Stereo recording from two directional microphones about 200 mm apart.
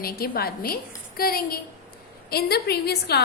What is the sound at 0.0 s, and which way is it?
A woman's voice, 50° left (ahead or behind).